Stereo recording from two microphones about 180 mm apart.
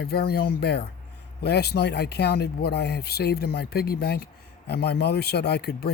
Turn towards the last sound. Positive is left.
turn(degrees=65)  # may be behind; listen again after turning